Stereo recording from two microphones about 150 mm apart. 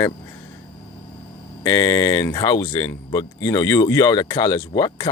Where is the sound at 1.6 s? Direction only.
25° left (ahead or behind).